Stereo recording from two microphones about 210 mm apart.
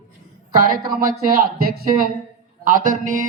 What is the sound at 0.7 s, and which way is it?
A man's voice, 45° right (ahead or behind).